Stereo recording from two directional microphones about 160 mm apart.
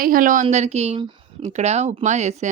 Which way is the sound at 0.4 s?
45° right (ahead or behind).